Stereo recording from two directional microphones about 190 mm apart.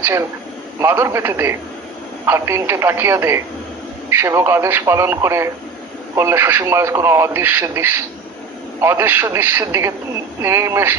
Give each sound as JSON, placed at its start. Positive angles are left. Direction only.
{"t": 0.0, "sound": "a man's voice", "side_deg": -15}